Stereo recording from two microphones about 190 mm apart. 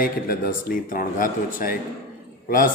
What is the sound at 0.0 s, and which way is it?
Speech, 50° left (ahead or behind).